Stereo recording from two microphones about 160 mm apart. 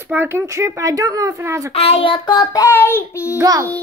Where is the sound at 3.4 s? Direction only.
25° right (ahead or behind).